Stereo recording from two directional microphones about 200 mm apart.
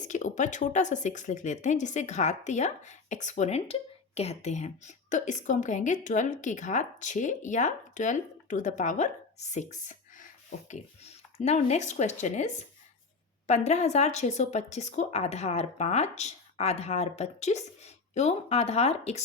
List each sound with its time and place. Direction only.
0.0 s a woman's voice: 40° left (ahead or behind)
13.5 s a woman's voice: 35° left (ahead or behind)